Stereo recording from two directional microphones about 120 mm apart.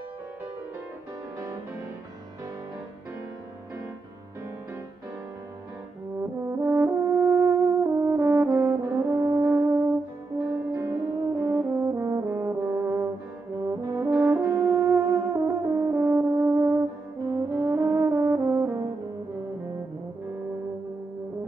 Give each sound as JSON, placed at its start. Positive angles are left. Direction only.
{"t": 6.6, "sound": "french horn", "side_deg": -20}
{"t": 11.4, "sound": "brass instrument", "side_deg": -20}
{"t": 14.2, "sound": "french horn", "side_deg": -20}
{"t": 17.2, "sound": "brass instrument", "side_deg": -30}